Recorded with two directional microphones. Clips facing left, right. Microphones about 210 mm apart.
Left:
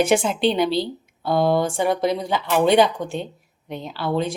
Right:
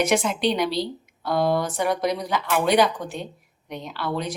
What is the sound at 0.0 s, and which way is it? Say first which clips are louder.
A woman's voice: left 3 dB; 30° left (ahead or behind).